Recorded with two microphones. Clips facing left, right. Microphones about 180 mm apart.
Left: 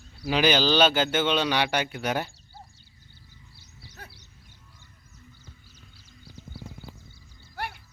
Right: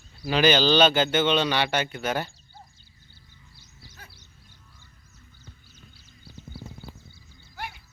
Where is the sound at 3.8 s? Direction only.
70° left (ahead or behind).